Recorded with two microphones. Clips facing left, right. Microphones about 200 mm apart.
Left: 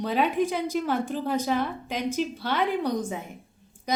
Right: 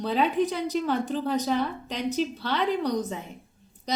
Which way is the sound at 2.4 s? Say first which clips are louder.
Even; 10° left (ahead or behind).